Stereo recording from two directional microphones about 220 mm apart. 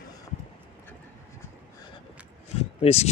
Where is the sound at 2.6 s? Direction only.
30° left (ahead or behind).